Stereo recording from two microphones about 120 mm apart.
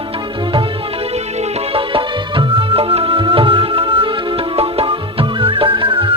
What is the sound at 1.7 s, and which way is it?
Music, 50° right (ahead or behind).